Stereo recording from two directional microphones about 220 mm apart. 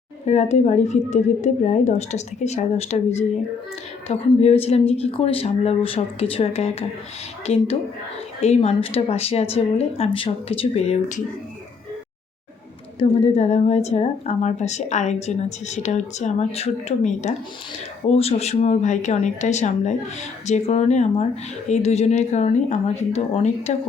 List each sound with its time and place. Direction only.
0.3 s a woman's voice: 30° left (ahead or behind)
13.0 s a woman's voice: 25° left (ahead or behind)